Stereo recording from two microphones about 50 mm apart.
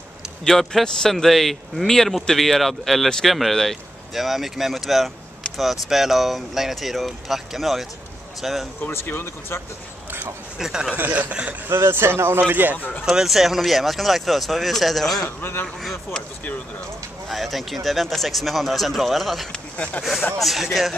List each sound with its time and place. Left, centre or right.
0.5 s speech: centre
8.9 s speech: left
10.6 s speech: centre
11.0 s a man's voice: right
11.7 s speech: right
12.7 s speech: left
13.0 s speech: centre
15.2 s a man's voice: left
17.3 s speech: centre
19.5 s speech: left
20.0 s speech: centre